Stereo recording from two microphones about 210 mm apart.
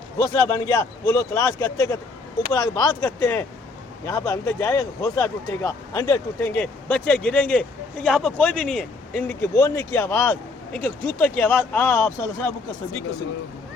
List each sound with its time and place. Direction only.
0.4 s speech: 20° left (ahead or behind)